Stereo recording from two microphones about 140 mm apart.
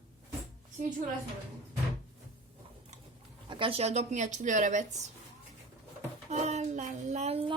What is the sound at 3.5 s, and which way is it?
Speech, 40° right (ahead or behind).